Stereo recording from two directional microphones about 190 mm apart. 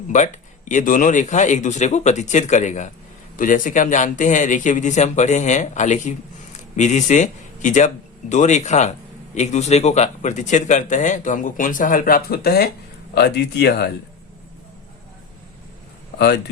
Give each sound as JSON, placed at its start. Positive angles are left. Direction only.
{"t": 0.1, "sound": "speech", "side_deg": 40}
{"t": 16.1, "sound": "speech", "side_deg": 65}